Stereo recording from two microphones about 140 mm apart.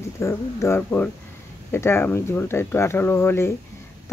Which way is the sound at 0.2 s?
20° left (ahead or behind).